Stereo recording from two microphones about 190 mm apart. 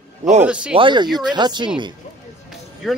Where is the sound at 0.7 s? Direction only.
25° right (ahead or behind).